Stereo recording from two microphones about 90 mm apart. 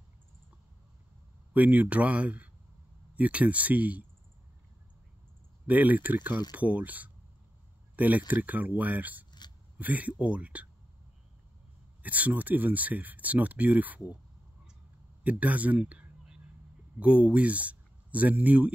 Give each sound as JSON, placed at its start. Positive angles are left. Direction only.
{"t": 1.5, "sound": "speech", "side_deg": -20}
{"t": 5.7, "sound": "speech", "side_deg": -20}
{"t": 7.9, "sound": "a sound", "side_deg": -20}
{"t": 8.3, "sound": "speech", "side_deg": -20}
{"t": 12.0, "sound": "speech", "side_deg": -15}
{"t": 15.2, "sound": "speech", "side_deg": -15}